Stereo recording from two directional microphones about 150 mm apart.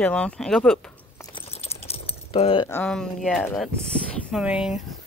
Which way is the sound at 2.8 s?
5° left (ahead or behind).